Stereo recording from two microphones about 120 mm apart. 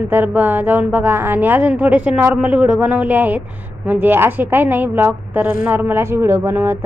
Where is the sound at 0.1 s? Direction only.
15° right (ahead or behind).